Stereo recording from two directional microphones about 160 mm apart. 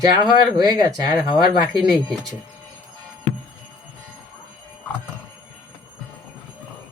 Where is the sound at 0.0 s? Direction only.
25° right (ahead or behind).